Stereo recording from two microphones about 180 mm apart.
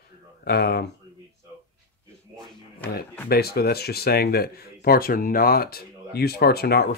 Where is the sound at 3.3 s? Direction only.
60° left (ahead or behind).